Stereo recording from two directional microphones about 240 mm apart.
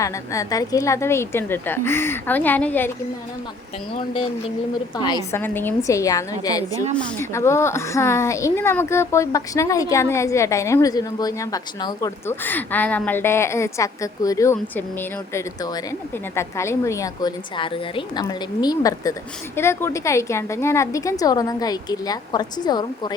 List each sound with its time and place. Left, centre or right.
0.0 s speech: centre
3.9 s speech: left